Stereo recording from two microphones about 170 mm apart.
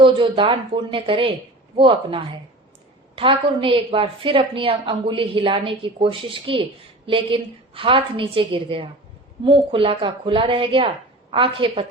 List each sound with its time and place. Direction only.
0.0 s a woman's voice: 30° right (ahead or behind)